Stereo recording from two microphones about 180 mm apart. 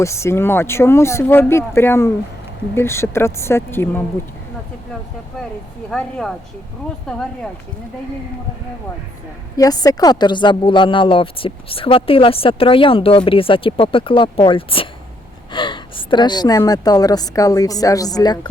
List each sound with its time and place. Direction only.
0.0 s speech: 15° left (ahead or behind)
5.9 s speech: 5° left (ahead or behind)
9.6 s a woman's voice: 20° left (ahead or behind)